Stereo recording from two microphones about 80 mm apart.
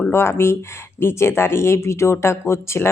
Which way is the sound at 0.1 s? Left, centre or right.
Left.